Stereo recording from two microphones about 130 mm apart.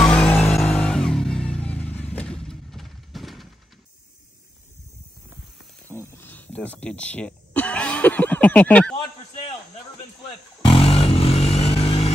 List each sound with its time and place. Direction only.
0.0 s music: 10° left (ahead or behind)
6.1 s speech: 15° left (ahead or behind)
10.6 s motorcycle: 45° left (ahead or behind)